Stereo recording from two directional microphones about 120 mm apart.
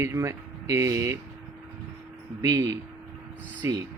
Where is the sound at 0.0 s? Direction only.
25° right (ahead or behind).